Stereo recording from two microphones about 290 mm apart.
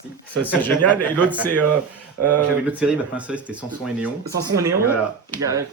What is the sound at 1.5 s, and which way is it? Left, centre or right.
Speech, right.